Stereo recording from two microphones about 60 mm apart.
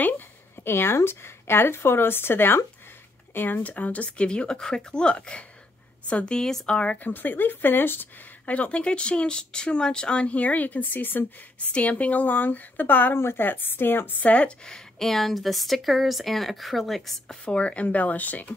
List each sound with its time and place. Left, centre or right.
0.7 s a woman's voice: left; by 7.0 s centre
7.0 s speech: left
8.5 s speech: left
14.3 s a woman's voice: centre
17.5 s speech: centre